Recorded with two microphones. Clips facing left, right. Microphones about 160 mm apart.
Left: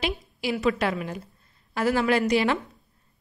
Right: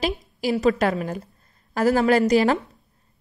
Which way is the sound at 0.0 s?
40° right (ahead or behind).